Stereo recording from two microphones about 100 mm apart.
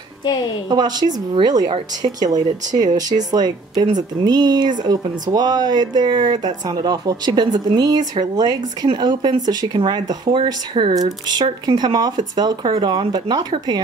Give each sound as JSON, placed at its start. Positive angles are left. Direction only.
{"t": 0.7, "sound": "speech", "side_deg": -40}